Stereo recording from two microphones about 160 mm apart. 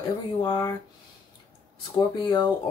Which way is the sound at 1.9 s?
25° left (ahead or behind).